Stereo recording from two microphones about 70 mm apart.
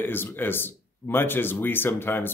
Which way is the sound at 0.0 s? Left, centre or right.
Left.